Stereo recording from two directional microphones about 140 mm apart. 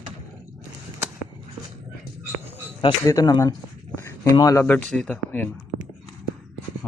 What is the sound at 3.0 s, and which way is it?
Speech, 25° left (ahead or behind).